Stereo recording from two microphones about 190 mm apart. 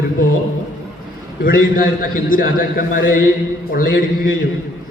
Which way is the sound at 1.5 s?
50° left (ahead or behind).